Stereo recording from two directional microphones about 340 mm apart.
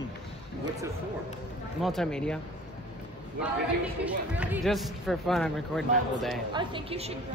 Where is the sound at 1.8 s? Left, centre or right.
Centre.